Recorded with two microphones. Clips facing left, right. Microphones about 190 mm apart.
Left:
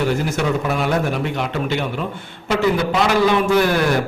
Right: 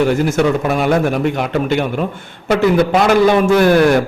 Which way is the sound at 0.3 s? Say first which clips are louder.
Right 6 dB; 50° right (ahead or behind).